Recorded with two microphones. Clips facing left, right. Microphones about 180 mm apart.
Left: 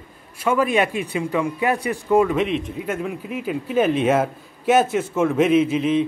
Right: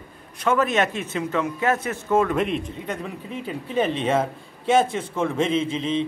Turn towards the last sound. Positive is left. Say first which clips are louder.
# left 6 dB
turn(degrees=10)  # may be behind; listen again after turning